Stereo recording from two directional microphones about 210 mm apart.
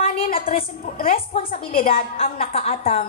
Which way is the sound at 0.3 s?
25° left (ahead or behind).